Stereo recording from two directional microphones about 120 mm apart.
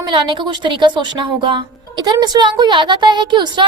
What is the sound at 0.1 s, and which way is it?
A woman's voice, 45° right (ahead or behind).